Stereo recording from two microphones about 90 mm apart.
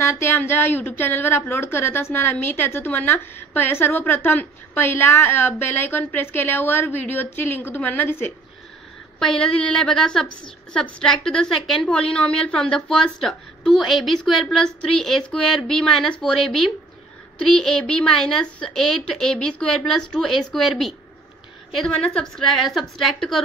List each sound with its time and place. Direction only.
0.0 s a woman's voice: 30° left (ahead or behind)
9.2 s a woman's voice: 10° left (ahead or behind)